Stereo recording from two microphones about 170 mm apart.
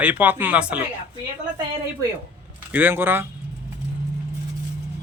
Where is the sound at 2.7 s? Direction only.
10° right (ahead or behind).